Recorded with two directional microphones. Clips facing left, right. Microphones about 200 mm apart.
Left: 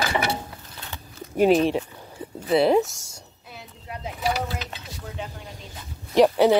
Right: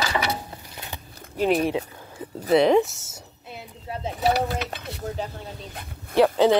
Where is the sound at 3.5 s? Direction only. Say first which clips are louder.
Right 4 dB; 30° right (ahead or behind).